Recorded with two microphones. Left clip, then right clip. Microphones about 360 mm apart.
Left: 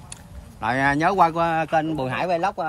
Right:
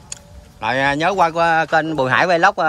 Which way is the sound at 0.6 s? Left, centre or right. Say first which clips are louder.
Right 3 dB; centre.